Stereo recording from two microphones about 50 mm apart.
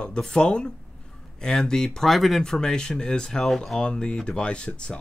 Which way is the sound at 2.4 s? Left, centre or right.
Centre.